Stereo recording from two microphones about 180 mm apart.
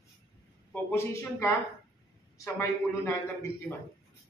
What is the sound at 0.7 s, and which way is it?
Speech, 10° left (ahead or behind).